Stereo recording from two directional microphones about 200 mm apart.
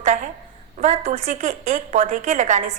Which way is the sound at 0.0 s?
35° right (ahead or behind).